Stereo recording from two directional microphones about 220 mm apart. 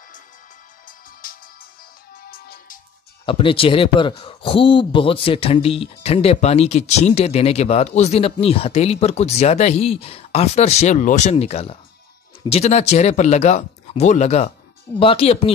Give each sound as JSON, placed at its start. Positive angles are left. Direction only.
{"t": 0.8, "sound": "music", "side_deg": 40}
{"t": 3.3, "sound": "speech", "side_deg": 25}